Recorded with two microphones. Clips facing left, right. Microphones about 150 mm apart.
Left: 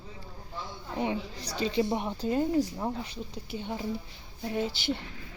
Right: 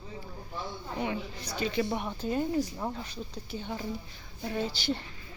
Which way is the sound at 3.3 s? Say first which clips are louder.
Left 2 dB; 20° left (ahead or behind).